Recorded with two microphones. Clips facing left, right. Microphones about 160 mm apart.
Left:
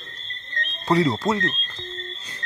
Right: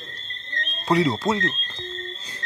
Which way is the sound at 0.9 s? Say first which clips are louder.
Even; 15° right (ahead or behind).